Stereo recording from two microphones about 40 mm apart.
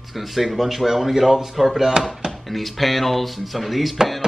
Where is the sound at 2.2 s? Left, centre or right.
Centre.